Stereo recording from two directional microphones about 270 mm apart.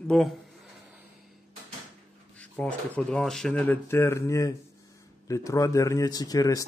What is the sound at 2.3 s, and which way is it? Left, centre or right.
Speech, centre.